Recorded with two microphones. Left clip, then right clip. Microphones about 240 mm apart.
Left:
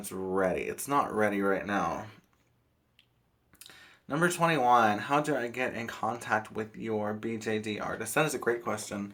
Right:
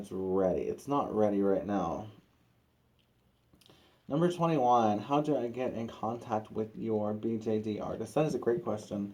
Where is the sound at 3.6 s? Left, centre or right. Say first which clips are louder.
Left 2 dB; left.